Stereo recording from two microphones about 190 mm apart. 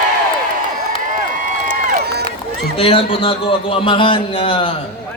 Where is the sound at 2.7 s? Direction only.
30° left (ahead or behind).